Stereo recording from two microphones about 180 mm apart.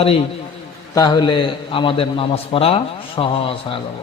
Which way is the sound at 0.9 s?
20° left (ahead or behind).